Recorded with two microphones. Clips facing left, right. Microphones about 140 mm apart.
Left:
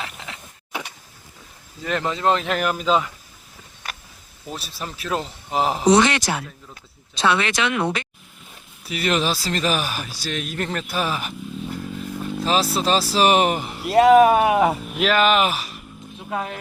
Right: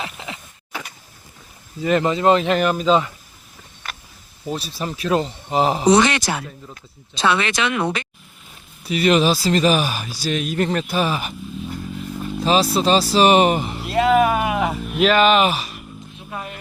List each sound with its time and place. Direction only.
0.0 s a sound: 5° right (ahead or behind)
1.8 s speech: 5° right (ahead or behind)
4.4 s speech: centre (ahead or behind)
8.9 s speech: centre (ahead or behind)
13.9 s a sound: 35° left (ahead or behind)
14.9 s speech: centre (ahead or behind)
16.3 s speech: 90° left